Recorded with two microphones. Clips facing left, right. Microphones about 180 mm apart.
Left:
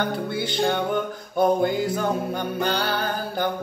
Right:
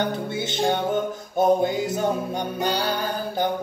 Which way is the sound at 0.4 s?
20° right (ahead or behind).